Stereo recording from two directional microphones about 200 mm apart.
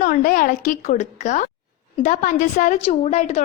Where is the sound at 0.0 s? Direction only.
45° left (ahead or behind).